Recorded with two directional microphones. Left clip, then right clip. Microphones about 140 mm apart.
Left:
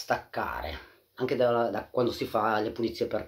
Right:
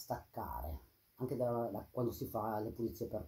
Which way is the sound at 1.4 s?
35° left (ahead or behind).